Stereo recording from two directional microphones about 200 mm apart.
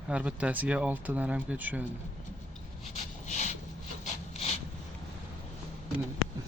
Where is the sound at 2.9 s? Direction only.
35° left (ahead or behind).